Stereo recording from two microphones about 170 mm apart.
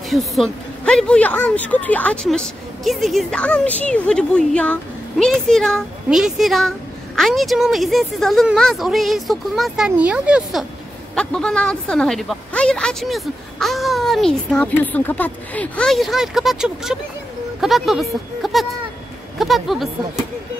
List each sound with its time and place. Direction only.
0.1 s a woman's voice: centre (ahead or behind)